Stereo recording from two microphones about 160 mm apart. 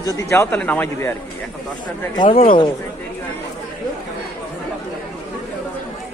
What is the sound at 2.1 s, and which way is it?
Speech, 35° left (ahead or behind).